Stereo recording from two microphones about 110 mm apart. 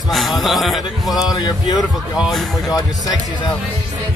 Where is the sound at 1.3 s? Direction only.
40° left (ahead or behind).